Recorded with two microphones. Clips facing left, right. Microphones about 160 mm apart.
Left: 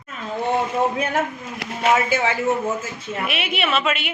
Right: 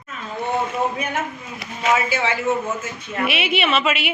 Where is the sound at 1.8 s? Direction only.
50° left (ahead or behind).